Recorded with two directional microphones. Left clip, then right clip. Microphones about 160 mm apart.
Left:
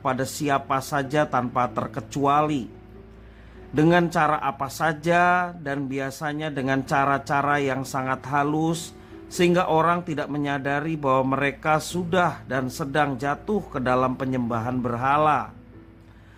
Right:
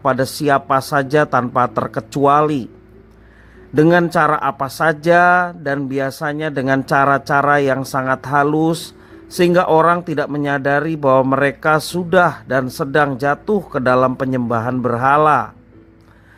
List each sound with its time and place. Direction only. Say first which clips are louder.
0.0 s speech: right 9 dB; 40° right (ahead or behind)
3.8 s speech: right 7 dB; 35° right (ahead or behind)